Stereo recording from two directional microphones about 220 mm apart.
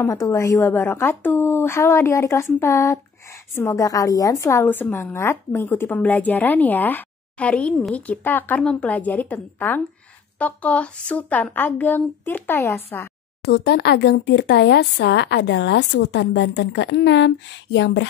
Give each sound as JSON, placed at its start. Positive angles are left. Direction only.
{"t": 0.0, "sound": "a woman's voice", "side_deg": 15}
{"t": 13.5, "sound": "speech", "side_deg": 45}